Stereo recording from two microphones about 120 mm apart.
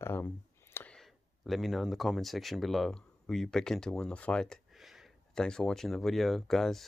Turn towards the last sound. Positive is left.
turn(degrees=5)  # may be behind; listen again after turning